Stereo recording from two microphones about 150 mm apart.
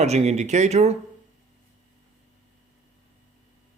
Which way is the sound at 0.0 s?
45° right (ahead or behind).